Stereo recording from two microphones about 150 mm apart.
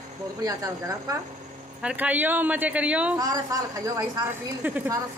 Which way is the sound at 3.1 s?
25° right (ahead or behind).